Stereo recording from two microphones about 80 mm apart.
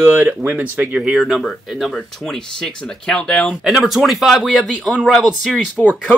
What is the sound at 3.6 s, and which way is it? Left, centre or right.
Speech, centre.